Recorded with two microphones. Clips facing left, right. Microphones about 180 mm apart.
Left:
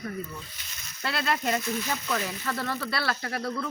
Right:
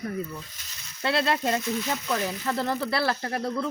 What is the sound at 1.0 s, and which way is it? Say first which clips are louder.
Speech: right 4 dB; 25° right (ahead or behind).